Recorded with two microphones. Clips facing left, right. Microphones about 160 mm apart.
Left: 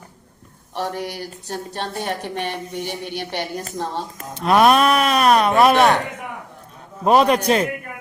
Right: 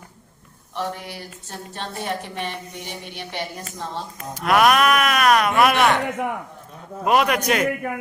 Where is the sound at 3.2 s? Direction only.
40° left (ahead or behind).